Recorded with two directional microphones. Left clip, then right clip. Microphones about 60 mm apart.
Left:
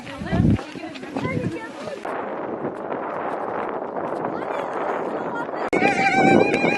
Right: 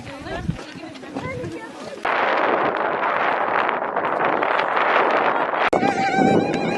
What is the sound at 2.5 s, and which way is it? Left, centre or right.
Wind noise, right.